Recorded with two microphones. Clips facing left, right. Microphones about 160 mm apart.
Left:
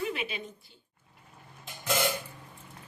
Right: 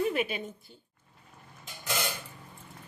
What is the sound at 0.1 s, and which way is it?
Speech, 50° right (ahead or behind).